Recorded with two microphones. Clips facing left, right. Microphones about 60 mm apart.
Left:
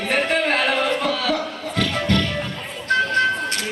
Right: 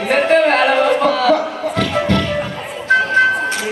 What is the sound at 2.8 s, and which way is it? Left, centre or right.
Music, centre.